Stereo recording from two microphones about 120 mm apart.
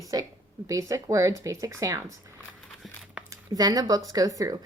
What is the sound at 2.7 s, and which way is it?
Crumpling, centre (ahead or behind).